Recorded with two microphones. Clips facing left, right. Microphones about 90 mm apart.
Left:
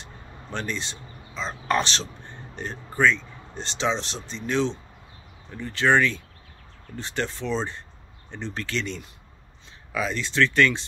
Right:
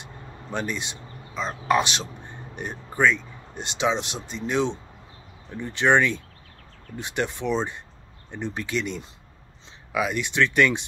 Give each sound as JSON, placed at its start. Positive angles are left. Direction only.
{"t": 0.0, "sound": "speech", "side_deg": -10}